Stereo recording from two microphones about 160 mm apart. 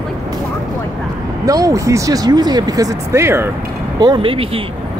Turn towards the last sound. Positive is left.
turn(degrees=-35)  # may be behind; listen again after turning